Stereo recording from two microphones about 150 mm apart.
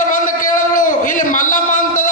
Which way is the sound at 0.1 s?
60° left (ahead or behind).